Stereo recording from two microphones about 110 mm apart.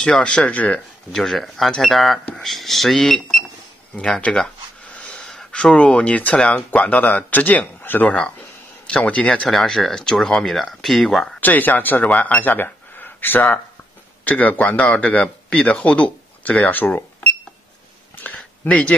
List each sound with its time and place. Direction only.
0.0 s speech: 10° left (ahead or behind)
11.4 s speech: 15° left (ahead or behind)
18.2 s a sound: 15° left (ahead or behind)